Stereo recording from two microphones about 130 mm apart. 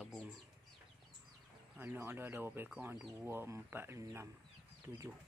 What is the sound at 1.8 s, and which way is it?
Speech, 15° right (ahead or behind).